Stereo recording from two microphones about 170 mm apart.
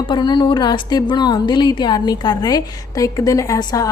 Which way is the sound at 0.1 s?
25° left (ahead or behind).